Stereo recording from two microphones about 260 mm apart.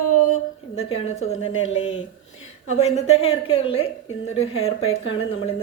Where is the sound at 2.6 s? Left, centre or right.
Left.